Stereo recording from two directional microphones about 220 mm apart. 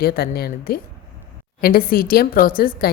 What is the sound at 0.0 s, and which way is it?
A woman's voice, 45° left (ahead or behind).